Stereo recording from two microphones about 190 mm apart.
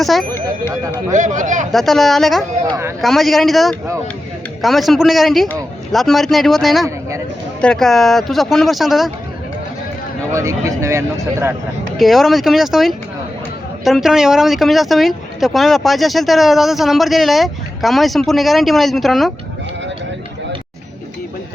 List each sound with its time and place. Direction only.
0.0 s speech: centre (ahead or behind)
0.3 s speech: 10° left (ahead or behind)
1.1 s a man's voice: 40° right (ahead or behind)
1.7 s speech: centre (ahead or behind)
10.3 s speech: 15° right (ahead or behind)
11.9 s speech: centre (ahead or behind)